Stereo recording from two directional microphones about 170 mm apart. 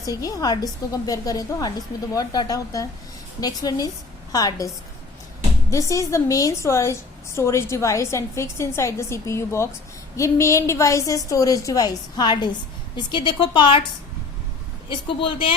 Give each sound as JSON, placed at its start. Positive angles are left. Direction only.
{"t": 0.2, "sound": "a woman's voice", "side_deg": 20}
{"t": 5.7, "sound": "a woman's voice", "side_deg": 20}
{"t": 14.8, "sound": "a woman's voice", "side_deg": 30}